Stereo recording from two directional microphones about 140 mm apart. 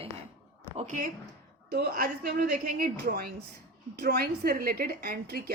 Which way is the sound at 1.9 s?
90° right.